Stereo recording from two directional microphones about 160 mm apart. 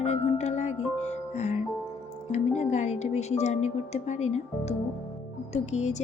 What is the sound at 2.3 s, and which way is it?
Speech, 45° left (ahead or behind).